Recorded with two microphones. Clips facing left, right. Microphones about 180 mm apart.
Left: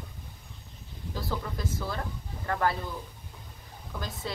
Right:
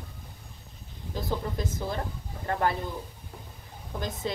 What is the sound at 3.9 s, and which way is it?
Speech, 20° right (ahead or behind).